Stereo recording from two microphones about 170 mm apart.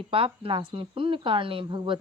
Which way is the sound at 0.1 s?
30° right (ahead or behind).